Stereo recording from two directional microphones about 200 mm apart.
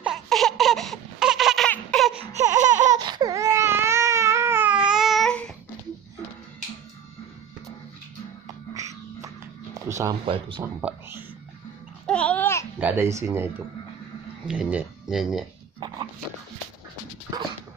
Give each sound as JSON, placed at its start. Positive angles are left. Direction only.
{"t": 0.0, "sound": "a sound", "side_deg": 0}
{"t": 2.1, "sound": "baby cry", "side_deg": -35}
{"t": 3.0, "sound": "baby cry", "side_deg": -20}
{"t": 8.7, "sound": "music", "side_deg": -15}
{"t": 10.2, "sound": "speech", "side_deg": -25}
{"t": 10.6, "sound": "speech", "side_deg": -10}
{"t": 12.1, "sound": "babbling", "side_deg": 5}
{"t": 12.8, "sound": "speech", "side_deg": -10}
{"t": 14.5, "sound": "speech", "side_deg": -5}
{"t": 15.8, "sound": "dog", "side_deg": -20}